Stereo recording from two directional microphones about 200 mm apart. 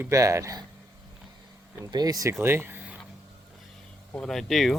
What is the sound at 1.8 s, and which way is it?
Speech, 20° right (ahead or behind).